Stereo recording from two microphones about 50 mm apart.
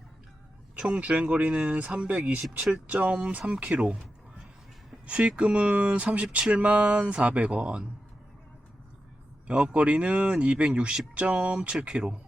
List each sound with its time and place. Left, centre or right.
0.8 s speech: right
5.0 s speech: right
9.5 s speech: right